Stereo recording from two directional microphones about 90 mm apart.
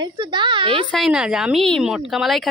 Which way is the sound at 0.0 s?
55° right (ahead or behind).